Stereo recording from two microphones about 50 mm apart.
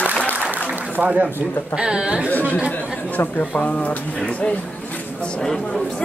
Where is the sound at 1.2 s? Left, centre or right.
Right.